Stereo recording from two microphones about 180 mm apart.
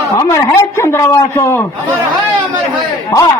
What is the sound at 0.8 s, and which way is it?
Speech, 15° left (ahead or behind).